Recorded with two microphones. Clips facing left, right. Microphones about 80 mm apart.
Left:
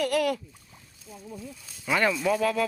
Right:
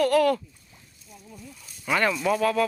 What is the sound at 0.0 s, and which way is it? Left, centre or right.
Speech, centre.